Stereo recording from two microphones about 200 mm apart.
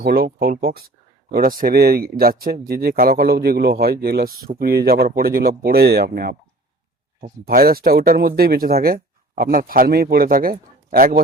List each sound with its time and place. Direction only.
0.0 s speech: 50° right (ahead or behind)